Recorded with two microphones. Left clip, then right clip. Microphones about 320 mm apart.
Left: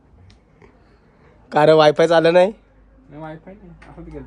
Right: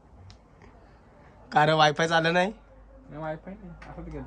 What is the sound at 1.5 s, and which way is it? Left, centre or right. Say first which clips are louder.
A man's voice: left 9 dB; centre.